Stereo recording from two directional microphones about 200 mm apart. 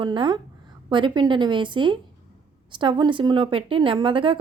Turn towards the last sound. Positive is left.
turn(degrees=-25)  # may be behind; listen again after turning